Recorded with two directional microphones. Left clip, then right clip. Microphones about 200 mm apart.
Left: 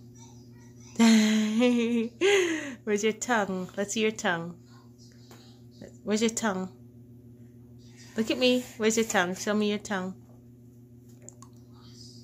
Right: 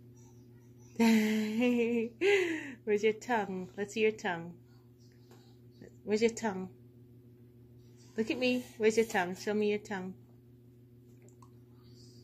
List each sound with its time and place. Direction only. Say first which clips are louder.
0.9 s a sound: left 6 dB; 15° left (ahead or behind)
1.6 s humming: left 4 dB; 65° left (ahead or behind)
2.1 s a woman's voice: left 6 dB; 20° left (ahead or behind)
5.8 s speech: left 2 dB; 15° left (ahead or behind)
8.2 s a woman's voice: left 7 dB; 15° left (ahead or behind)